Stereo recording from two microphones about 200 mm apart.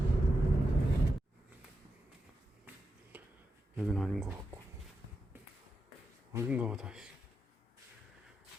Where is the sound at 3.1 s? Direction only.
10° right (ahead or behind).